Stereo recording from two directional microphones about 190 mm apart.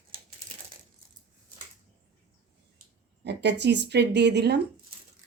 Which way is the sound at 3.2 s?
65° right (ahead or behind).